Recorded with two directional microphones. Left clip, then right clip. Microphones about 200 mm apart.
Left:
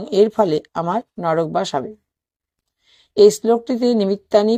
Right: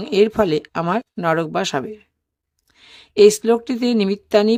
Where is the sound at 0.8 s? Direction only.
15° right (ahead or behind).